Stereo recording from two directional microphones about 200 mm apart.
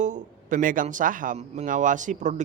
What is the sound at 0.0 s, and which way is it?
Speech, 40° right (ahead or behind).